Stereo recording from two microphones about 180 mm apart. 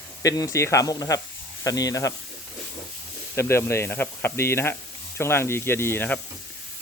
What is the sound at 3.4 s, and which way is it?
Speech, 15° left (ahead or behind).